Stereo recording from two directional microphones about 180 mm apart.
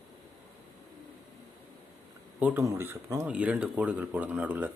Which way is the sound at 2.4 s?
10° right (ahead or behind).